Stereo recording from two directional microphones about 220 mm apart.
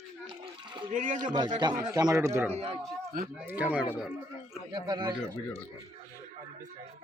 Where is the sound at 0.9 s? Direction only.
35° right (ahead or behind).